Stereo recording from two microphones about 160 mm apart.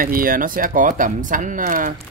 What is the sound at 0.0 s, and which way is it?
Speech, 60° right (ahead or behind).